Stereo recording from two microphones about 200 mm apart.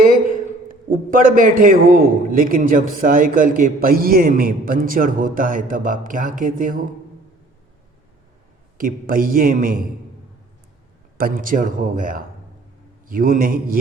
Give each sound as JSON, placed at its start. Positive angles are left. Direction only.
{"t": 0.0, "sound": "a man's voice", "side_deg": -45}
{"t": 8.8, "sound": "a man's voice", "side_deg": -45}
{"t": 11.2, "sound": "a man's voice", "side_deg": -45}